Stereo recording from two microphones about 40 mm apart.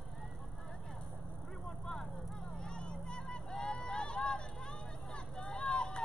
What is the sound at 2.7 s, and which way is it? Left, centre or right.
Vehicle, left.